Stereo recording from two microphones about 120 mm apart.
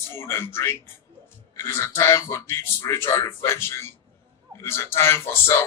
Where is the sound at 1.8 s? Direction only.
25° left (ahead or behind).